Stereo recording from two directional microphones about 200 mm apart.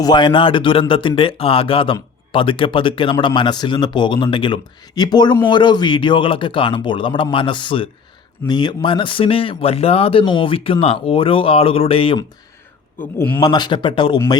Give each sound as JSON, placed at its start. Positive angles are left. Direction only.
{"t": 0.0, "sound": "speech", "side_deg": 20}
{"t": 13.0, "sound": "a man's voice", "side_deg": 10}
{"t": 13.5, "sound": "speech", "side_deg": 20}